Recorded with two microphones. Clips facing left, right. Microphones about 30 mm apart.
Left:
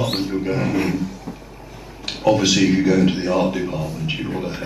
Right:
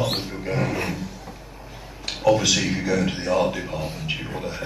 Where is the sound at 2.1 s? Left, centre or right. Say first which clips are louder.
Left 2 dB; centre.